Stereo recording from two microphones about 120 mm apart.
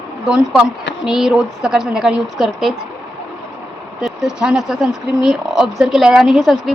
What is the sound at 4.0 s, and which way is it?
Speech, 5° right (ahead or behind).